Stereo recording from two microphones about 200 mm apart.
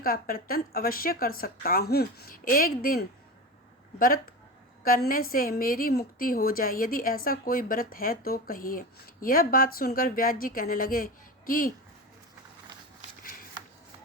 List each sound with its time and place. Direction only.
0.0 s a woman's voice: 45° left (ahead or behind)